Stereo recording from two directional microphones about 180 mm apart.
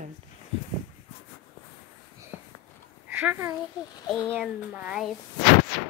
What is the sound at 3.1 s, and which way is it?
Speech, 10° right (ahead or behind).